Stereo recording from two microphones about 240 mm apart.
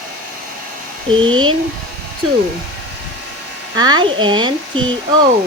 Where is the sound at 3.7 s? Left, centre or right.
Centre.